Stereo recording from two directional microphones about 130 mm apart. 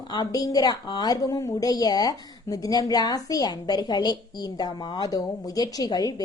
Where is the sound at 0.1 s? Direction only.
30° left (ahead or behind).